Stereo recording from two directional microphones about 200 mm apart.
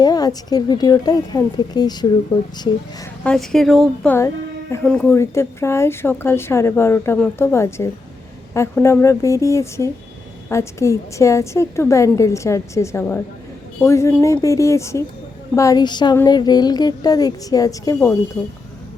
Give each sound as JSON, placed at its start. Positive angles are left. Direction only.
{"t": 0.0, "sound": "a woman's voice", "side_deg": 20}
{"t": 3.2, "sound": "a woman's voice", "side_deg": 0}